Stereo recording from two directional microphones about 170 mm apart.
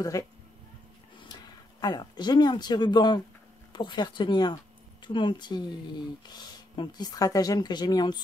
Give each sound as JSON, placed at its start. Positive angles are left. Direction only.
{"t": 0.1, "sound": "speech", "side_deg": 20}